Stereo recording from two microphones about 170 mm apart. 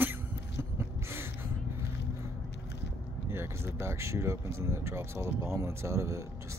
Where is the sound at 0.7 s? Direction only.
15° right (ahead or behind).